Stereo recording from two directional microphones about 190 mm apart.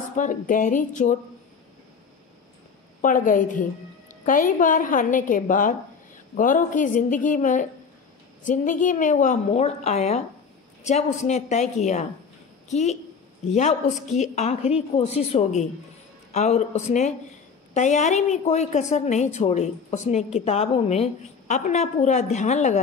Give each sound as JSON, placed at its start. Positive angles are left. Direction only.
{"t": 0.1, "sound": "a woman's voice", "side_deg": 45}
{"t": 3.0, "sound": "a woman's voice", "side_deg": 45}